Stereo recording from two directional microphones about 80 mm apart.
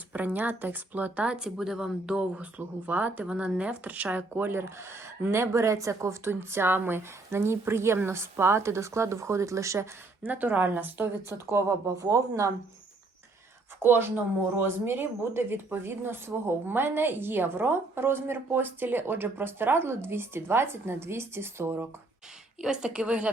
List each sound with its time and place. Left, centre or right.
0.1 s speech: centre
10.3 s a woman's voice: right
13.7 s speech: right
22.6 s a woman's voice: centre